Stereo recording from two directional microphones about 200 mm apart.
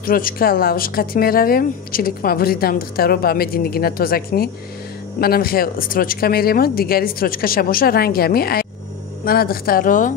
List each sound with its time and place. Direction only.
0.0 s speech: 45° left (ahead or behind)